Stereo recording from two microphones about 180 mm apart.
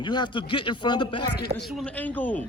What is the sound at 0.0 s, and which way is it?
Speech, 25° left (ahead or behind).